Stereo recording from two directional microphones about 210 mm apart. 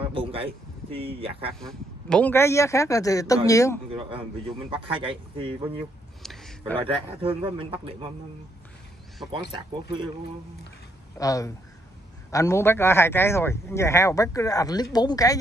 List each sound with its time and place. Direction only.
0.1 s a sound: 25° right (ahead or behind)
0.9 s a man's voice: 25° right (ahead or behind)
1.5 s a man's voice: centre (ahead or behind)
3.9 s a man's voice: 25° right (ahead or behind)
6.2 s a sound: centre (ahead or behind)
6.8 s a man's voice: 25° right (ahead or behind)
9.3 s a man's voice: 25° right (ahead or behind)
11.1 s a man's voice: 15° left (ahead or behind)